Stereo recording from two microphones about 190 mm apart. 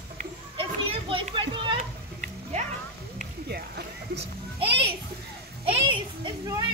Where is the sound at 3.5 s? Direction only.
60° right (ahead or behind).